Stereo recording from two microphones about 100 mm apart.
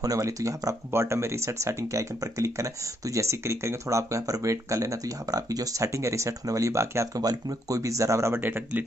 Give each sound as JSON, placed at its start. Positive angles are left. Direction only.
{"t": 0.0, "sound": "speech", "side_deg": -35}
{"t": 7.2, "sound": "speech", "side_deg": -40}